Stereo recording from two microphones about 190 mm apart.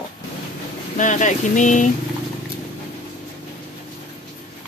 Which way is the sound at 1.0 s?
40° left (ahead or behind).